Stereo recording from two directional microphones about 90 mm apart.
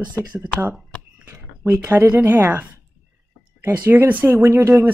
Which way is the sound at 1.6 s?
30° right (ahead or behind).